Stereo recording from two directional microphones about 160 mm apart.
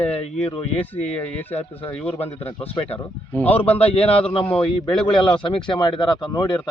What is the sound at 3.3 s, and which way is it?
A man's voice, 10° left (ahead or behind).